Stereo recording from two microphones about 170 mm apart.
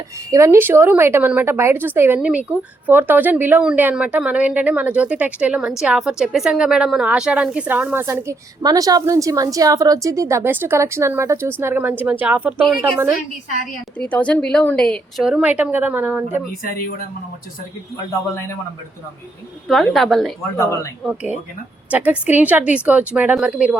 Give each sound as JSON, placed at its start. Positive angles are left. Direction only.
{"t": 0.3, "sound": "a woman's voice", "side_deg": -15}
{"t": 14.0, "sound": "a woman's voice", "side_deg": 5}
{"t": 16.5, "sound": "speech", "side_deg": 60}
{"t": 19.6, "sound": "a woman's voice", "side_deg": 0}